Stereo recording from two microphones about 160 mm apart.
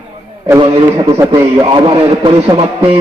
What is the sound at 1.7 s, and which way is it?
A man's voice, 30° right (ahead or behind).